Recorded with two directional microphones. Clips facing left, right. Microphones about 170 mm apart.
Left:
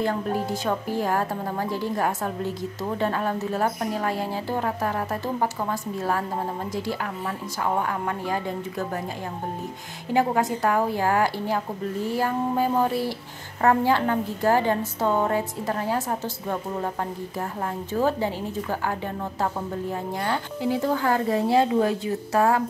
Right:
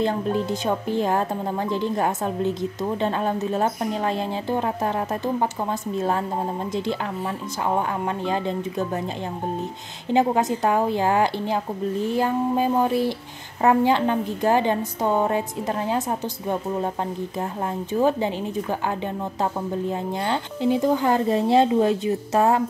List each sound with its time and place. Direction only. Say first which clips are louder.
0.0 s a woman's voice: right 2 dB; 20° right (ahead or behind)
8.3 s a woman's voice: right 3 dB; 20° right (ahead or behind)
10.1 s a woman's voice: right 2 dB; 20° right (ahead or behind)
17.9 s a woman's voice: right 3 dB; 20° right (ahead or behind)